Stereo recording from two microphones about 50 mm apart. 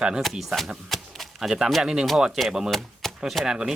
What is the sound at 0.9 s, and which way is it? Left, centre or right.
Door, centre.